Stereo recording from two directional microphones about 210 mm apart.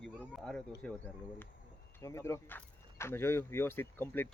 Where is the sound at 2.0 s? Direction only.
15° left (ahead or behind).